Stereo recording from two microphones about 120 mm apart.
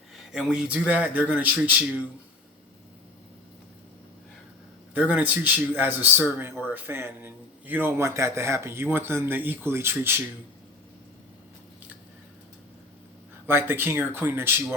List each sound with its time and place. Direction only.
0.2 s speech: 5° right (ahead or behind)
4.9 s a man's voice: 15° right (ahead or behind)
13.5 s a man's voice: 20° right (ahead or behind)